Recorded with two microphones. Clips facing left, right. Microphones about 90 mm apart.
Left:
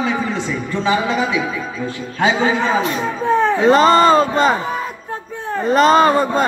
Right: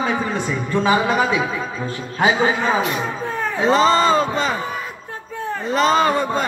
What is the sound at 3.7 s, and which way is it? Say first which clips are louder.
Speech: left 3 dB; 50° left (ahead or behind).